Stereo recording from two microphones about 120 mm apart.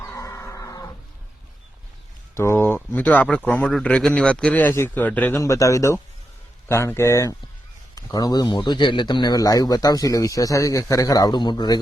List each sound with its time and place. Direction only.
0.0 s music: 25° left (ahead or behind)
2.3 s a sound: 20° left (ahead or behind)
2.9 s a man's voice: 15° left (ahead or behind)
5.4 s a man's voice: 25° left (ahead or behind)